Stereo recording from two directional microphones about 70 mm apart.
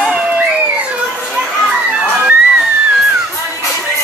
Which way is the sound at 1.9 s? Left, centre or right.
Centre.